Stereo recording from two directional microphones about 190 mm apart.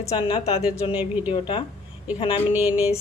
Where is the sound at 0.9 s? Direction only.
10° right (ahead or behind).